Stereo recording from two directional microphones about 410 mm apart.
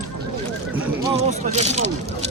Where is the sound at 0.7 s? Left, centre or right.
Centre.